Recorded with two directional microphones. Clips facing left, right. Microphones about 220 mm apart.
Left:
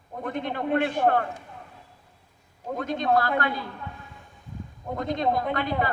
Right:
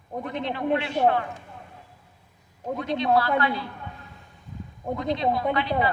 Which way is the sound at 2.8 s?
45° left (ahead or behind).